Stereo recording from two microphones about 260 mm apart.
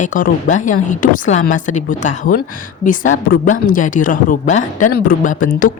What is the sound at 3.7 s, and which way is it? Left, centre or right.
Speech, left.